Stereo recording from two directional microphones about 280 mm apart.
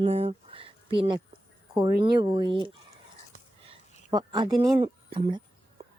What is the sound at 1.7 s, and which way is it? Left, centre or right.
Speech, centre.